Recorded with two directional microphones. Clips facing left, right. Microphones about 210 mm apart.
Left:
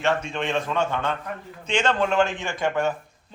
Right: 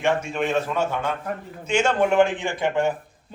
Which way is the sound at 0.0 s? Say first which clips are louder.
Right 2 dB; 10° right (ahead or behind).